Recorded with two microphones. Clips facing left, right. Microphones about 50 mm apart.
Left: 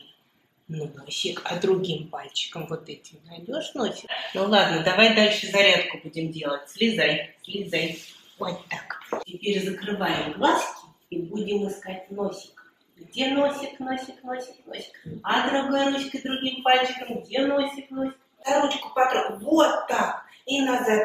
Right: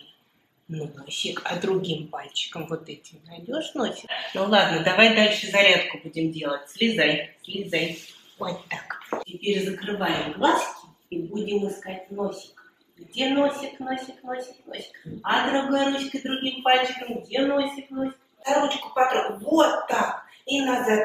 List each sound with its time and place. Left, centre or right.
1.2 s speech: centre
4.0 s a woman's voice: centre